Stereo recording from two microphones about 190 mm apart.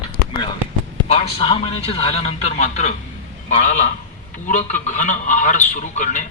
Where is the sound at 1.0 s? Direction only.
30° left (ahead or behind).